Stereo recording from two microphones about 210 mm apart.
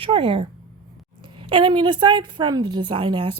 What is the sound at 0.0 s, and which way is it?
Speech, 25° right (ahead or behind).